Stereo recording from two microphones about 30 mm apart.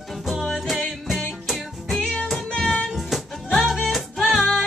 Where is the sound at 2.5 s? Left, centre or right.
Centre.